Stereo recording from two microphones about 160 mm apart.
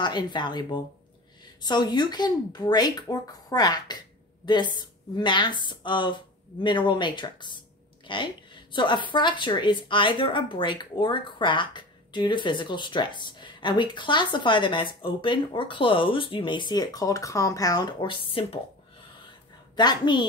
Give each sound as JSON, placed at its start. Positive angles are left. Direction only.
{"t": 0.0, "sound": "a woman's voice", "side_deg": 30}
{"t": 19.7, "sound": "a woman's voice", "side_deg": 25}